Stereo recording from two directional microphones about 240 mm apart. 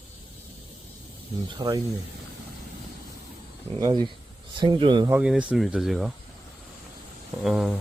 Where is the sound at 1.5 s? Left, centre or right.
Centre.